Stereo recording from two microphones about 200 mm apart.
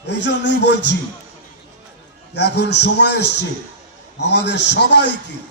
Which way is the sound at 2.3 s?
55° left (ahead or behind).